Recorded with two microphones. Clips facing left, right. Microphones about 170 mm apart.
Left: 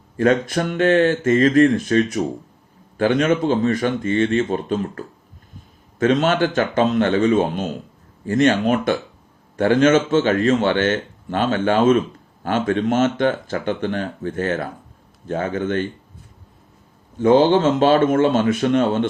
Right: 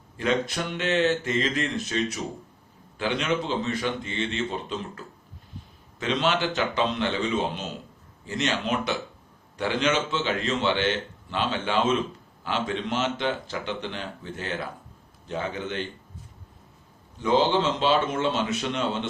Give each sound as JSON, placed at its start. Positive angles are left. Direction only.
{"t": 0.2, "sound": "speech", "side_deg": 50}
{"t": 17.2, "sound": "speech", "side_deg": 50}